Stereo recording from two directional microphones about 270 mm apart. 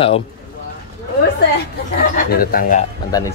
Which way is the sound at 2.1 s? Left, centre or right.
Left.